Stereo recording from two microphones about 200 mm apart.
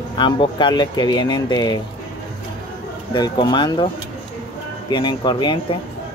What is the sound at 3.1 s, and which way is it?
Speech, 20° left (ahead or behind).